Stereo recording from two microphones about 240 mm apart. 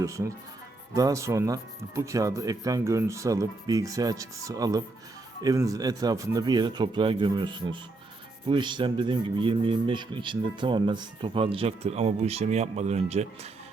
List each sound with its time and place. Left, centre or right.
0.0 s speech: centre